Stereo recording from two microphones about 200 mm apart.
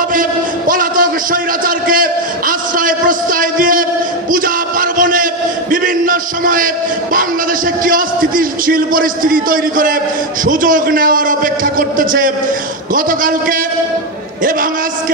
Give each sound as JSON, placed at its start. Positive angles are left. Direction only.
{"t": 0.1, "sound": "a man's voice", "side_deg": -45}
{"t": 4.3, "sound": "a sound", "side_deg": -45}
{"t": 7.2, "sound": "a man's voice", "side_deg": -45}